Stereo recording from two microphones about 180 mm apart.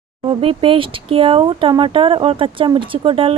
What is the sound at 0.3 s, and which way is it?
Speech, 30° right (ahead or behind).